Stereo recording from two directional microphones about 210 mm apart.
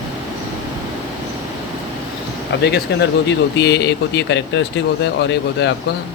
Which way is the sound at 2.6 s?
55° left (ahead or behind).